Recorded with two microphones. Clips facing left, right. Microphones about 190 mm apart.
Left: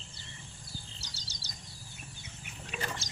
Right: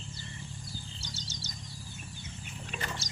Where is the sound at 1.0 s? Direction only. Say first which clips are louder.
Right 7 dB; 35° left (ahead or behind).